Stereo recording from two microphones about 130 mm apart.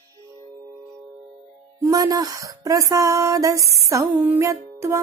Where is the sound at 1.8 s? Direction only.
30° right (ahead or behind).